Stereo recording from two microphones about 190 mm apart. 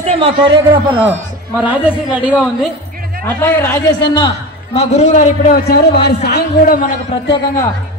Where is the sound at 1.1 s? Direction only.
10° right (ahead or behind).